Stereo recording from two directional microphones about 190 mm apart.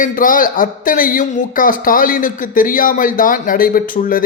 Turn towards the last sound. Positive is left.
turn(degrees=45)  # may be behind; listen again after turning